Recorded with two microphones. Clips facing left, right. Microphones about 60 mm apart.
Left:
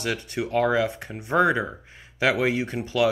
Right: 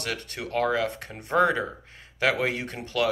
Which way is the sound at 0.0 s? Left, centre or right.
Centre.